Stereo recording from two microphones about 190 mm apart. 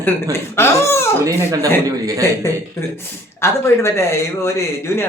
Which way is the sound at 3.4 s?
15° left (ahead or behind).